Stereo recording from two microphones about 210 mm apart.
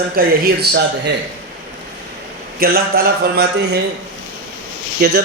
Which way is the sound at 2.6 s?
45° right (ahead or behind).